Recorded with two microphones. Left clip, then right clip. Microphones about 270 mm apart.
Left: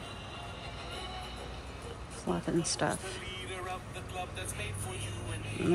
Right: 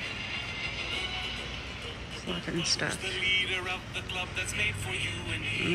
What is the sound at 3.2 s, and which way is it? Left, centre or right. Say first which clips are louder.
Vehicle: right 14 dB; right.